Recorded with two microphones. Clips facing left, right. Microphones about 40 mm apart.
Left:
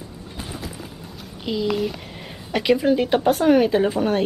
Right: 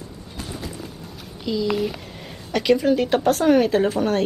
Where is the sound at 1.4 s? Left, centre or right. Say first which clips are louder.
Even; left.